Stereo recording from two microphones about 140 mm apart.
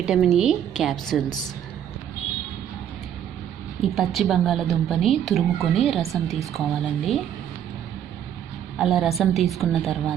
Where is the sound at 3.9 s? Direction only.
Centre (ahead or behind).